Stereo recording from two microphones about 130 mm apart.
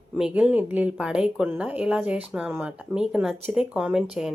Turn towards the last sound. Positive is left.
turn(degrees=-5)  # may be behind; listen again after turning